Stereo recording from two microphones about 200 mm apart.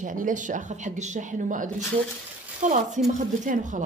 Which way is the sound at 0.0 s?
40° right (ahead or behind).